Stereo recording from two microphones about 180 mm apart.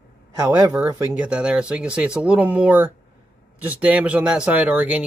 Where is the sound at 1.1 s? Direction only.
5° right (ahead or behind).